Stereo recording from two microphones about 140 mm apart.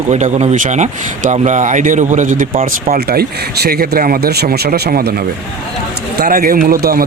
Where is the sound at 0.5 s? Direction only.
65° right (ahead or behind).